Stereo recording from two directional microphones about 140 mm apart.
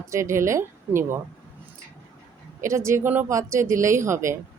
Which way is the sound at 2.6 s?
20° right (ahead or behind).